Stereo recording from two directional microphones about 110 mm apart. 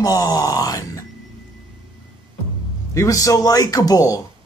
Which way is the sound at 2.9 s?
30° left (ahead or behind).